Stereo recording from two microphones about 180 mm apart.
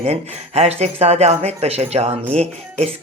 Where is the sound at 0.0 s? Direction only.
35° right (ahead or behind).